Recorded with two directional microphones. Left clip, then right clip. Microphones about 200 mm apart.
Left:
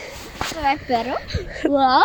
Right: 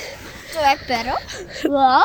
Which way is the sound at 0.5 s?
55° right (ahead or behind).